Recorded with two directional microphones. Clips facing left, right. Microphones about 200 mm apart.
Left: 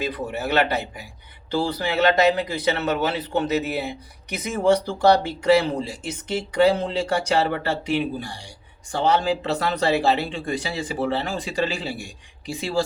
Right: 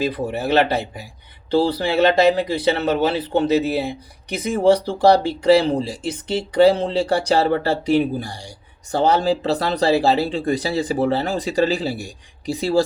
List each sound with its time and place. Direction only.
0.0 s speech: 30° right (ahead or behind)